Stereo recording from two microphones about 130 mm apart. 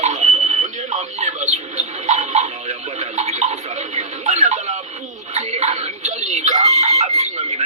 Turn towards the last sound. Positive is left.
turn(degrees=-60)  # may be behind; listen again after turning